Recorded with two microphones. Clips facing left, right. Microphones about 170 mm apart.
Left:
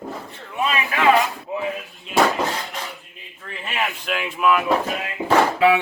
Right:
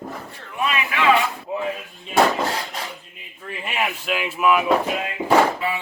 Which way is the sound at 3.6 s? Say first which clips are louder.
Right 1 dB; 10° right (ahead or behind).